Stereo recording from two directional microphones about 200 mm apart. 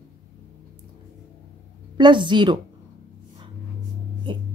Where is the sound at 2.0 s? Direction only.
25° right (ahead or behind).